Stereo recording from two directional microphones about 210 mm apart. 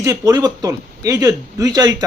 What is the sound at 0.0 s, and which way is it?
Speech, 15° right (ahead or behind).